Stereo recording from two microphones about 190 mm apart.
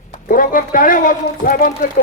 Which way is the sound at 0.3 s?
45° left (ahead or behind).